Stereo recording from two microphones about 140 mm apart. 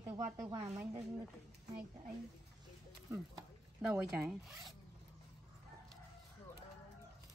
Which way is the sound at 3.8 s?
5° right (ahead or behind).